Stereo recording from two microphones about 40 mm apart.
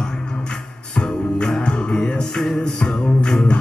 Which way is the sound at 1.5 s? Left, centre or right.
Centre.